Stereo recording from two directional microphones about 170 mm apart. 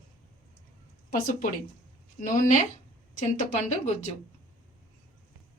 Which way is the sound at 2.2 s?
50° left (ahead or behind).